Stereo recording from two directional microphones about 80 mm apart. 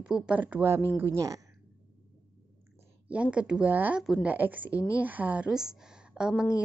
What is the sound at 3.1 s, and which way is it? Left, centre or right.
A woman's voice, centre.